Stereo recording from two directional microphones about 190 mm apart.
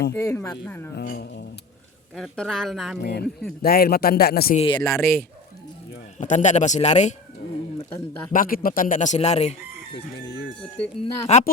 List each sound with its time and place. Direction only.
0.1 s speech: 15° left (ahead or behind)
0.9 s speech: 55° left (ahead or behind)
2.1 s speech: 5° left (ahead or behind)
3.0 s speech: 60° left (ahead or behind)
4.5 s speech: 25° left (ahead or behind)
4.8 s speech: 15° left (ahead or behind)
6.1 s a man's voice: 40° left (ahead or behind)
7.8 s speech: 15° left (ahead or behind)
8.3 s speech: 45° left (ahead or behind)
10.2 s speech: 65° left (ahead or behind)
11.0 s a man's voice: 35° left (ahead or behind)